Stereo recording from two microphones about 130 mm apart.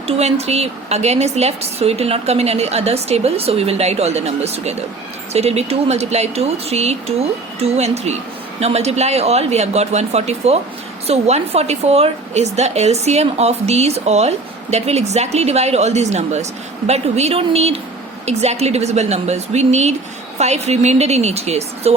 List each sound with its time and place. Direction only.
0.1 s a woman's voice: 55° right (ahead or behind)